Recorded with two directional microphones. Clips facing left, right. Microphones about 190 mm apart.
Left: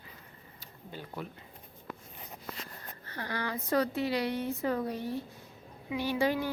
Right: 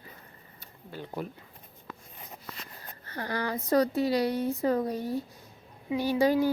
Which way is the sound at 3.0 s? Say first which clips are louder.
Right 4 dB; 40° right (ahead or behind).